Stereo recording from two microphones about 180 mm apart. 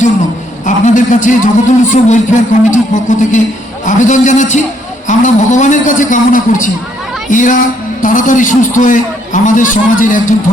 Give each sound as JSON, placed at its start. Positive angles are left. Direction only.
{"t": 0.6, "sound": "a man's voice", "side_deg": 45}